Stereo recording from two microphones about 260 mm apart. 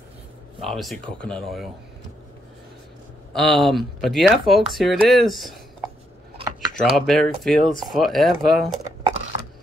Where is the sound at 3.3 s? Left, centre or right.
Centre.